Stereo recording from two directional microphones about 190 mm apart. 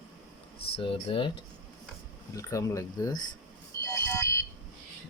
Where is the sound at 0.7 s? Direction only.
30° left (ahead or behind).